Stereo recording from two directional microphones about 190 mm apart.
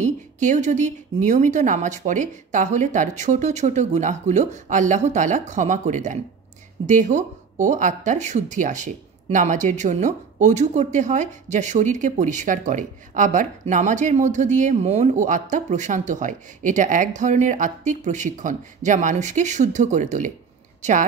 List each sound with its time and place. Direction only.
0.0 s speech: 40° right (ahead or behind)